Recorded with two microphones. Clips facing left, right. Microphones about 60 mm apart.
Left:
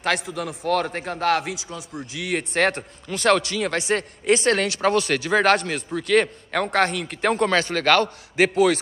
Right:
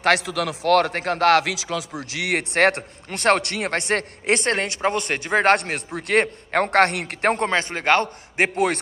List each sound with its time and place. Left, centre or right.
0.0 s speech: right
2.0 s speech: right
4.5 s speech: right
5.6 s speech: right
7.2 s speech: right
7.4 s a man's voice: right